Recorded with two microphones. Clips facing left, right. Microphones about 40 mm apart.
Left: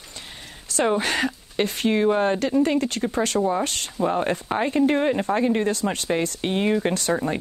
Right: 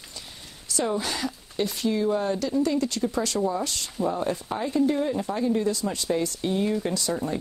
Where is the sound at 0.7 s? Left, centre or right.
Left.